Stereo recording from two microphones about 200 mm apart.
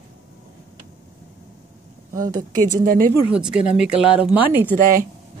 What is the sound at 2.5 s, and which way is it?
Speech, 45° right (ahead or behind).